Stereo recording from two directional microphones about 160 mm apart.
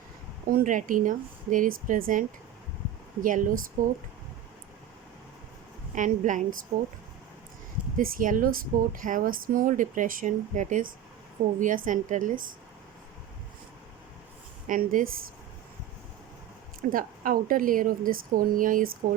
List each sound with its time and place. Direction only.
0.4 s speech: 60° right (ahead or behind)
5.9 s a woman's voice: 50° right (ahead or behind)
7.9 s a woman's voice: 60° right (ahead or behind)
14.7 s speech: 60° right (ahead or behind)
16.9 s speech: 60° right (ahead or behind)